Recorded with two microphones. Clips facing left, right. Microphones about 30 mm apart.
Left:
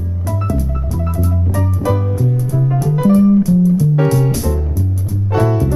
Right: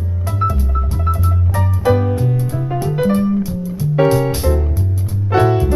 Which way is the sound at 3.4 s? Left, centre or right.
Right.